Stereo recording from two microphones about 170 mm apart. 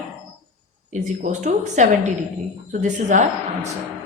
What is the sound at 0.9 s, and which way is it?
A woman's voice, 45° right (ahead or behind).